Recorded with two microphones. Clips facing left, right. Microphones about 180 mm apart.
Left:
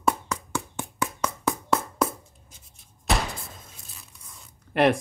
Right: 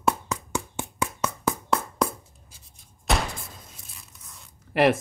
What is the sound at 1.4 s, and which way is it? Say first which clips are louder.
Music: left 1 dB; centre (ahead or behind).